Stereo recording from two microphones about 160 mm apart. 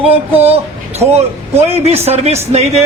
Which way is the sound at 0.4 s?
40° right (ahead or behind).